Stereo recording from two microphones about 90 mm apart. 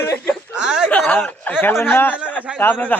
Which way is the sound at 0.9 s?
15° left (ahead or behind).